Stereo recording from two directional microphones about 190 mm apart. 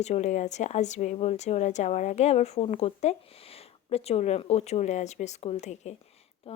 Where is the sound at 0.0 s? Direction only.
35° left (ahead or behind).